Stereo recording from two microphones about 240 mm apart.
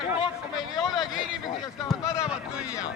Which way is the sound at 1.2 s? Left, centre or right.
Centre.